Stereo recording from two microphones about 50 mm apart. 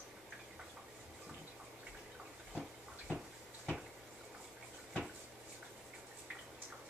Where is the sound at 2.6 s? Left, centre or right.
Right.